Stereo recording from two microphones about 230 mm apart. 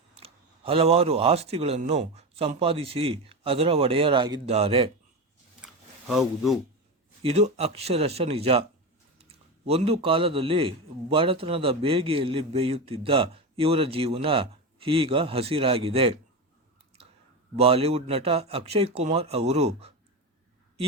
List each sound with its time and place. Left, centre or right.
0.2 s a man's voice: right
5.6 s a sound: centre
7.2 s a man's voice: right
17.6 s a man's voice: right